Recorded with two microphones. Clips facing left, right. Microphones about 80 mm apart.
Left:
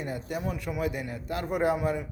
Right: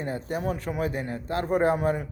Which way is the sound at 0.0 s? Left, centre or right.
Right.